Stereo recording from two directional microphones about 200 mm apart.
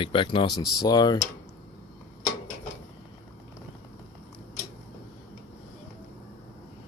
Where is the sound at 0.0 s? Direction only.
25° left (ahead or behind).